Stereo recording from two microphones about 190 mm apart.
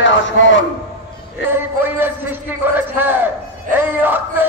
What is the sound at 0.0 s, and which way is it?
Speech, 80° left.